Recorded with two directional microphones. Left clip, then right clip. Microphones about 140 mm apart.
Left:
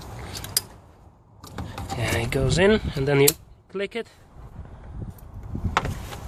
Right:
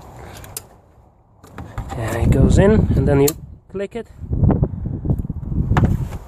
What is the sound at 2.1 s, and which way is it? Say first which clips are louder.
Speech: right 6 dB; 60° right (ahead or behind).